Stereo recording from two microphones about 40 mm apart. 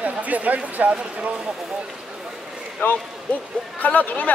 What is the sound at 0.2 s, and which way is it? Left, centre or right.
Speech, right.